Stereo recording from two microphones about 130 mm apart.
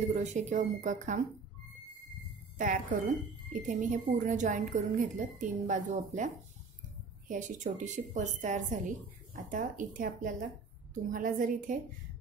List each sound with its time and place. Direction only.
0.1 s a woman's voice: 70° right (ahead or behind)
2.5 s a woman's voice: 85° right